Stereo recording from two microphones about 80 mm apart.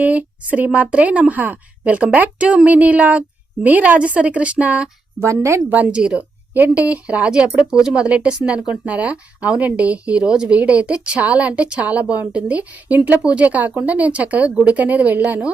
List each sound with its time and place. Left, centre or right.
0.0 s a woman's voice: centre
5.2 s a woman's voice: right
5.7 s a woman's voice: centre